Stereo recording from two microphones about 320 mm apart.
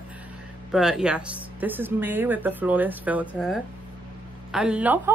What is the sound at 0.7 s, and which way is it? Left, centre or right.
Speech, centre.